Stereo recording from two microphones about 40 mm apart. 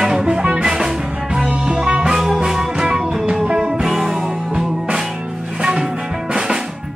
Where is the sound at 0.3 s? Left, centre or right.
Right.